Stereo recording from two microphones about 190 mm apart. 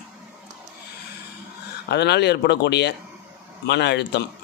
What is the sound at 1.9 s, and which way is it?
A man's voice, 60° left (ahead or behind).